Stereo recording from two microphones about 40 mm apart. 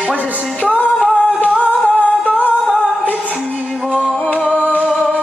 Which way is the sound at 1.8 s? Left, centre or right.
Left.